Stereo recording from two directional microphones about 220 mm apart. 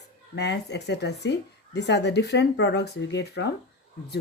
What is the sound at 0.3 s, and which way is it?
Speech, 50° left (ahead or behind).